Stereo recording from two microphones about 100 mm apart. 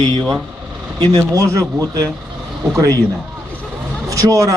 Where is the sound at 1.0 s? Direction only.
45° right (ahead or behind).